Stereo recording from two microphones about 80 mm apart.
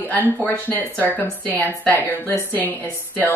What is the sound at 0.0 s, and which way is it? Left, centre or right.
Speech, right.